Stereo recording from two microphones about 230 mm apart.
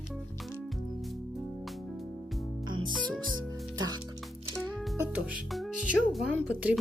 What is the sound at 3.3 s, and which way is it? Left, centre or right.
Music, centre.